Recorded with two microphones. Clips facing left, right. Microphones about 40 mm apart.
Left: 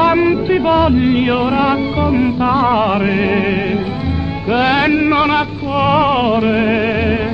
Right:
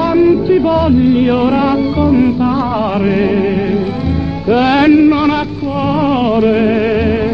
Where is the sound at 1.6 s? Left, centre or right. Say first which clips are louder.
Right 3 dB; left.